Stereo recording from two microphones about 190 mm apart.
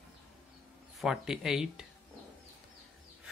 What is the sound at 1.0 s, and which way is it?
Speech, centre (ahead or behind).